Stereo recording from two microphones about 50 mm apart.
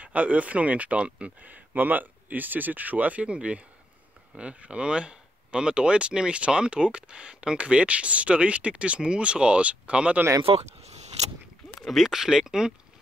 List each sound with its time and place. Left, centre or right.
0.0 s speech: right
1.5 s speech: right
11.8 s speech: centre